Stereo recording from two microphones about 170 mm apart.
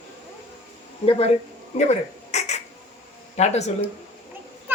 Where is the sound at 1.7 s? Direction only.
40° left (ahead or behind).